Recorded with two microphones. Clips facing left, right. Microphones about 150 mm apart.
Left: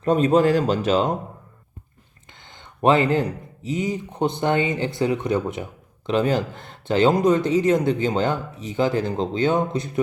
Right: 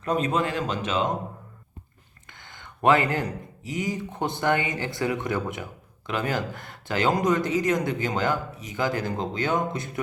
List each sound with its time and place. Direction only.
0.0 s speech: 30° left (ahead or behind)
2.5 s speech: 20° left (ahead or behind)